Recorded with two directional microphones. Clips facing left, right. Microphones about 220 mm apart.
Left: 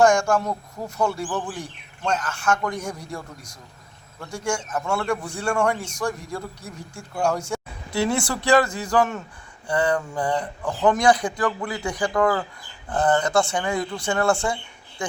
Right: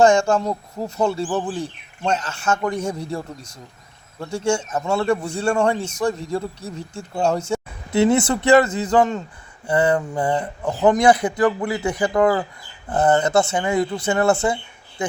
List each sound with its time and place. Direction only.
0.0 s a man's voice: 25° right (ahead or behind)